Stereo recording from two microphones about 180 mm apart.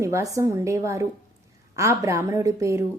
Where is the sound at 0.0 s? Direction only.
15° right (ahead or behind).